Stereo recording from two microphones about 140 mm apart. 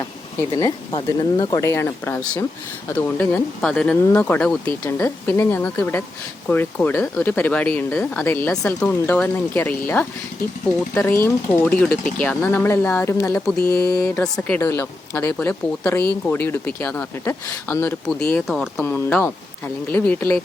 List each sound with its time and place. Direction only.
0.5 s speech: 30° left (ahead or behind); by 18.3 s 15° left (ahead or behind)
18.3 s speech: centre (ahead or behind)
18.9 s speech: 15° left (ahead or behind)